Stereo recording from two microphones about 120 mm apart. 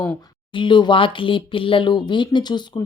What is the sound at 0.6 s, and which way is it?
Speech, 40° left (ahead or behind).